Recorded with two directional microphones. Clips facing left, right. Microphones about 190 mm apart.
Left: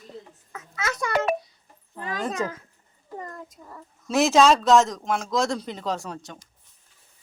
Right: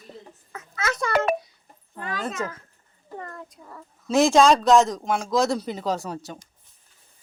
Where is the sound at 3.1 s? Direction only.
10° left (ahead or behind); by 6.4 s 5° right (ahead or behind).